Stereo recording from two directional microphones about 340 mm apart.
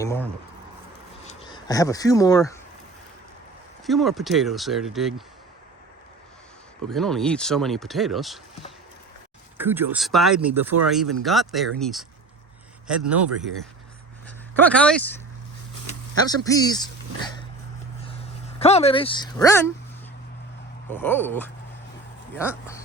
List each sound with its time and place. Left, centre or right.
0.0 s a sound: centre
1.2 s speech: centre
3.8 s speech: centre
6.8 s speech: centre
9.6 s speech: centre
13.1 s speech: centre
16.4 s speech: centre
18.6 s speech: centre
20.9 s speech: centre